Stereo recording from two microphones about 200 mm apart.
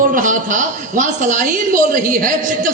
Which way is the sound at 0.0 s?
40° right (ahead or behind).